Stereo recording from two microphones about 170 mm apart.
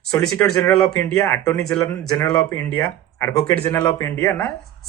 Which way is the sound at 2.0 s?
5° left (ahead or behind).